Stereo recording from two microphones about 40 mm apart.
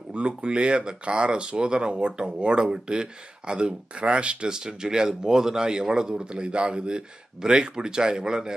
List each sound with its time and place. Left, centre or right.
0.1 s speech: right